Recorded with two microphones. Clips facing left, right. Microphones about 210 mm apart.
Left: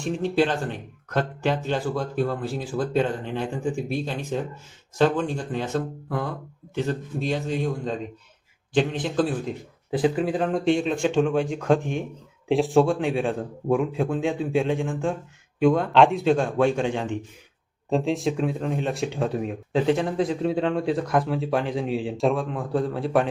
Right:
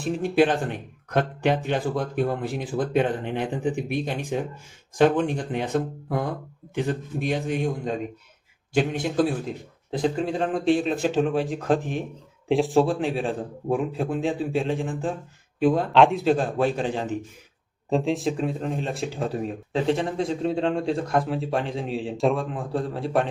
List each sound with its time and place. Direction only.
0.0 s speech: 15° right (ahead or behind)
9.9 s speech: 5° left (ahead or behind)